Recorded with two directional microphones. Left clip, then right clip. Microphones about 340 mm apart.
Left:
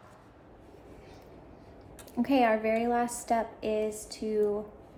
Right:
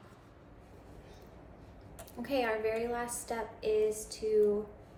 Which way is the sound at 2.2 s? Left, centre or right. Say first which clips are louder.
Left 7 dB; left.